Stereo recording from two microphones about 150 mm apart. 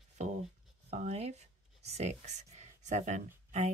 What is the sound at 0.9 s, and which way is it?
Speech, 50° right (ahead or behind).